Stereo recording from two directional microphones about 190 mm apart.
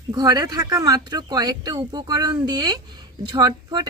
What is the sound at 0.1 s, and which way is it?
Speech, 20° right (ahead or behind).